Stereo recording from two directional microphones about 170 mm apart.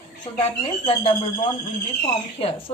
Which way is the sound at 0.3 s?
35° left (ahead or behind).